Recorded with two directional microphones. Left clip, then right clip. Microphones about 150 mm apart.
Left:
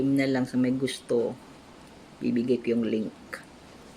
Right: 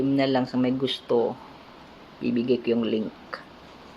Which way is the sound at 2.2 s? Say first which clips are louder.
Right 2 dB; 25° left (ahead or behind).